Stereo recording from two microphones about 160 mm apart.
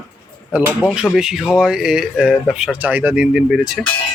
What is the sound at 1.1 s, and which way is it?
Speech, 5° right (ahead or behind).